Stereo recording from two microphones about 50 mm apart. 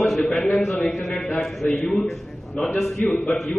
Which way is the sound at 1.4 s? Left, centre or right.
Centre.